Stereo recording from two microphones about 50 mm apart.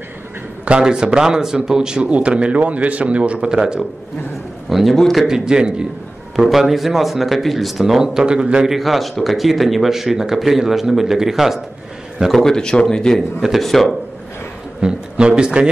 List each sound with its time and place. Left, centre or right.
0.7 s speech: centre
3.3 s a man's voice: centre
4.6 s a man's voice: centre
5.2 s a man's voice: centre
6.3 s a man's voice: centre
8.7 s a man's voice: centre
12.3 s a man's voice: centre
14.8 s speech: centre